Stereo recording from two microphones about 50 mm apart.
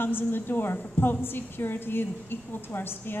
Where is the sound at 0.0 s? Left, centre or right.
Left.